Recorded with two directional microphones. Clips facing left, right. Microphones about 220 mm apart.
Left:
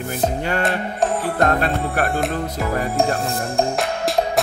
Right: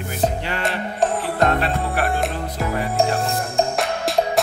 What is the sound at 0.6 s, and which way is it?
Music, centre (ahead or behind).